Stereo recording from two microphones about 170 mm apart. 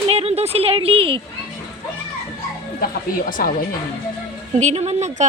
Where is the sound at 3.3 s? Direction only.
55° left (ahead or behind).